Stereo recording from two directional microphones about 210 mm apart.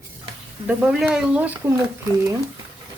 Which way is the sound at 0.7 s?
5° right (ahead or behind).